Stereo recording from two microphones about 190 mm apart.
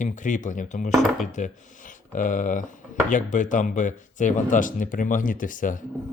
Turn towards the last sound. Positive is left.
turn(degrees=45)  # may be behind; listen again after turning